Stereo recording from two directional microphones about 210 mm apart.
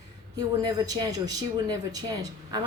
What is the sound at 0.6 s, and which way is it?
Speech, 20° right (ahead or behind).